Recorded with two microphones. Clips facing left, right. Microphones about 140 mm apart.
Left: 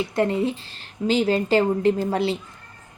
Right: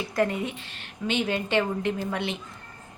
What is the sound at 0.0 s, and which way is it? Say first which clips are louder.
A woman's voice: left 4 dB; 25° left (ahead or behind).